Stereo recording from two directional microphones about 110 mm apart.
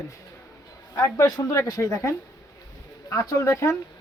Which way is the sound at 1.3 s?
35° left (ahead or behind).